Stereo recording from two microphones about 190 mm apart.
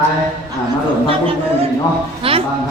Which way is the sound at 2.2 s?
30° right (ahead or behind).